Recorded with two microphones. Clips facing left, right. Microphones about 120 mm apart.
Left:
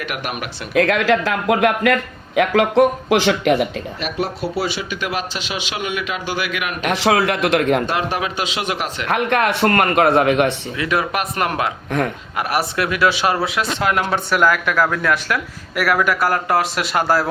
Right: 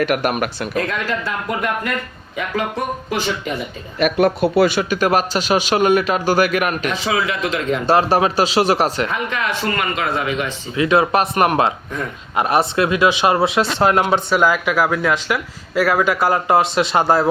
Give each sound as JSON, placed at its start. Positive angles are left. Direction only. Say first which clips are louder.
{"t": 0.0, "sound": "speech", "louder": "right 8 dB", "side_deg": -45}
{"t": 0.8, "sound": "a man's voice", "louder": "left 7 dB", "side_deg": 85}
{"t": 4.0, "sound": "speech", "louder": "right 9 dB", "side_deg": -55}
{"t": 6.8, "sound": "a man's voice", "louder": "left 4 dB", "side_deg": 65}
{"t": 7.9, "sound": "speech", "louder": "right 7 dB", "side_deg": -35}
{"t": 9.0, "sound": "a man's voice", "louder": "left 5 dB", "side_deg": 65}
{"t": 10.8, "sound": "speech", "louder": "right 8 dB", "side_deg": -25}
{"t": 14.0, "sound": "speech", "louder": "right 2 dB", "side_deg": -15}